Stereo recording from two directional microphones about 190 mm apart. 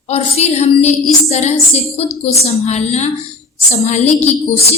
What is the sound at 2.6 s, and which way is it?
A woman's voice, 35° left (ahead or behind).